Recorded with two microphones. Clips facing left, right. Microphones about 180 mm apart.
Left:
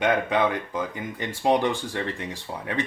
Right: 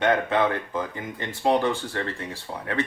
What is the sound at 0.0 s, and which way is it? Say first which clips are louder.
Speech: right 1 dB; 15° left (ahead or behind).